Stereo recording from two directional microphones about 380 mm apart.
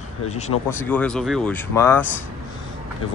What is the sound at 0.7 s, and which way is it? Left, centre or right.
Speech, centre.